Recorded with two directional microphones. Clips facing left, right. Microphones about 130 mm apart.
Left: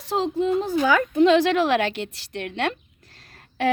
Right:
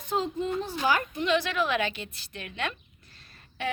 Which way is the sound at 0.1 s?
90° left.